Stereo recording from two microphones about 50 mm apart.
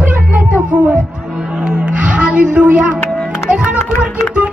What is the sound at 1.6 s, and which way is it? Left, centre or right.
Music, centre.